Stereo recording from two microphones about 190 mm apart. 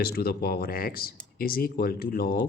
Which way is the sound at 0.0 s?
55° left (ahead or behind).